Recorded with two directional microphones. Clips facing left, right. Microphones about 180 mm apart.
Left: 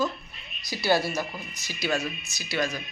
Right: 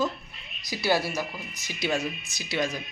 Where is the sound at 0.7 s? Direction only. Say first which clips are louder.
Left 1 dB; 15° right (ahead or behind).